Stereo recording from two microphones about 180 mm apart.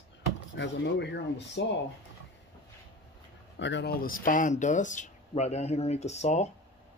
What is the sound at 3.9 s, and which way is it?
Speech, 50° left (ahead or behind).